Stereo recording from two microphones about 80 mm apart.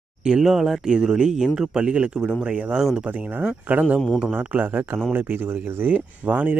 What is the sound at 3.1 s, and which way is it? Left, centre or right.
Speech, right.